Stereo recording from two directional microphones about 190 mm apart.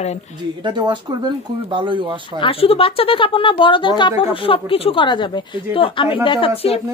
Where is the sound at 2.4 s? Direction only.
30° left (ahead or behind).